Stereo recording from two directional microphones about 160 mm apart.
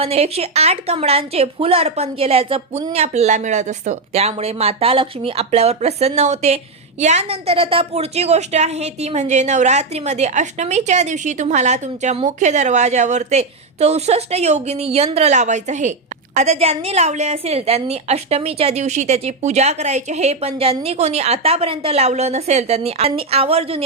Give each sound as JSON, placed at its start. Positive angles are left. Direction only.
{"t": 0.0, "sound": "a woman's voice", "side_deg": -40}